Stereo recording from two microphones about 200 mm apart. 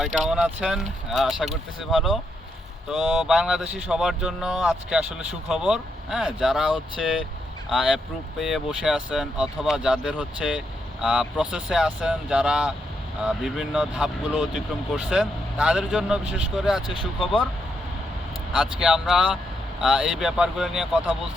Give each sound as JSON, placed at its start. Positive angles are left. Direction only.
{"t": 0.0, "sound": "speech", "side_deg": -5}
{"t": 7.7, "sound": "speech", "side_deg": 0}
{"t": 16.9, "sound": "speech", "side_deg": 25}
{"t": 18.5, "sound": "speech", "side_deg": -5}